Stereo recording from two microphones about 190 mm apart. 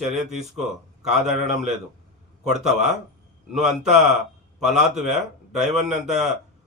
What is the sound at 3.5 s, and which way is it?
Speech, 40° right (ahead or behind).